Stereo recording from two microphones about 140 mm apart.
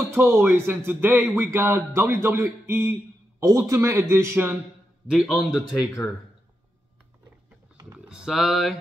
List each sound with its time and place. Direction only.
0.0 s speech: 15° right (ahead or behind)
5.1 s a man's voice: centre (ahead or behind)
8.1 s a man's voice: 5° right (ahead or behind)